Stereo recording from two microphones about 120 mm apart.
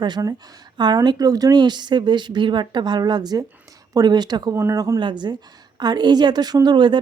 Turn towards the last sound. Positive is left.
turn(degrees=-40)  # may be behind; listen again after turning